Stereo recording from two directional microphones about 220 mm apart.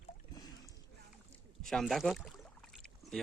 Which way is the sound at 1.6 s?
Centre (ahead or behind).